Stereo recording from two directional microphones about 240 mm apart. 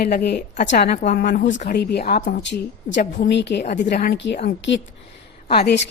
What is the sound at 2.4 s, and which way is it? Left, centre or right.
A woman's voice, left.